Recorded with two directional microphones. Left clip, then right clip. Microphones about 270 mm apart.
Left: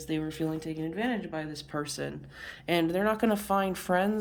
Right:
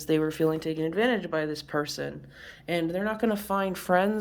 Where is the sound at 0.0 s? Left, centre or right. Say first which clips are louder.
Right 8 dB; centre.